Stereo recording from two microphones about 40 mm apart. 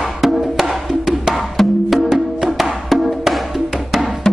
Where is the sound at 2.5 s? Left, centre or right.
Centre.